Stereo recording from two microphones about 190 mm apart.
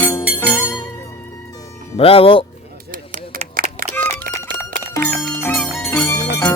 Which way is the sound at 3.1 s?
45° right (ahead or behind).